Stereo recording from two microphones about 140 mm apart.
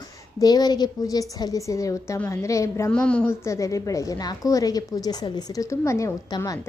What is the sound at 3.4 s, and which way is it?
A woman's voice, 20° left (ahead or behind).